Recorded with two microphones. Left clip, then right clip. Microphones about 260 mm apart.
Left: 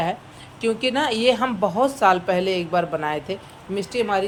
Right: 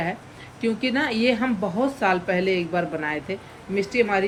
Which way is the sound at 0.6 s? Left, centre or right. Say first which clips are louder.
Left 3 dB; centre.